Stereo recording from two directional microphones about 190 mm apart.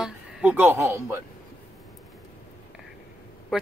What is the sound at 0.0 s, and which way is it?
Speech, 5° right (ahead or behind).